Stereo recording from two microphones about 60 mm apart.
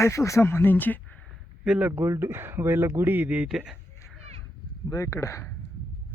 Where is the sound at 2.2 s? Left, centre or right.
Right.